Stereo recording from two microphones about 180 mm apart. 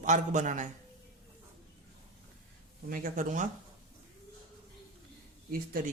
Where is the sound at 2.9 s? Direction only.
45° right (ahead or behind).